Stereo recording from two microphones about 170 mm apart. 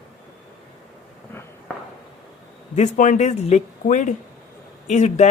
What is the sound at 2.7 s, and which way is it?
A man's voice, 45° left (ahead or behind).